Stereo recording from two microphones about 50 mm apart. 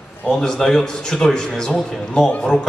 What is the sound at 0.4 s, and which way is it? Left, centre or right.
A man's voice, centre.